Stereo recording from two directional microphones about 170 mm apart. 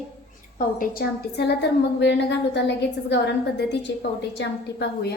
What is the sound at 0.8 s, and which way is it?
Speech, 65° left (ahead or behind).